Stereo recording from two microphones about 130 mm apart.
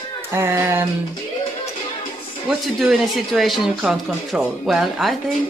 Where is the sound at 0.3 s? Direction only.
20° right (ahead or behind).